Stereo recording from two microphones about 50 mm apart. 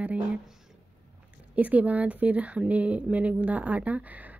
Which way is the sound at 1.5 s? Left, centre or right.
Right.